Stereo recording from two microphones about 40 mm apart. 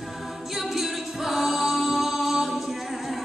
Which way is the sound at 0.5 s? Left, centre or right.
Centre.